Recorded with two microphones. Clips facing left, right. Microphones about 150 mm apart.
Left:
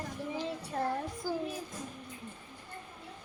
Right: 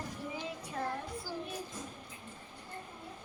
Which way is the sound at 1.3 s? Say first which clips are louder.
Left 9 dB; 50° left (ahead or behind).